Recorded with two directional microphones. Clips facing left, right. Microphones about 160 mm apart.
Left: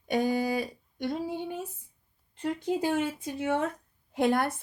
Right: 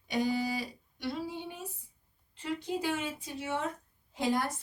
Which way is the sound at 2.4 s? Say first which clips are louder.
Left 5 dB; 50° left (ahead or behind).